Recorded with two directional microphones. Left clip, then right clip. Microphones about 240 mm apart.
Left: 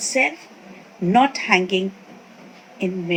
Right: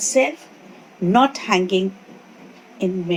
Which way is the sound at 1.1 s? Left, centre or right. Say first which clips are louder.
Even; centre.